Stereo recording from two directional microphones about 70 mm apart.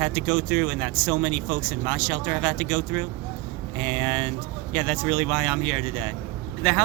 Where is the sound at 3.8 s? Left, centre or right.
Centre.